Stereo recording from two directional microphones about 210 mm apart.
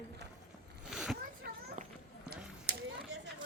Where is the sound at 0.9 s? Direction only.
Centre (ahead or behind).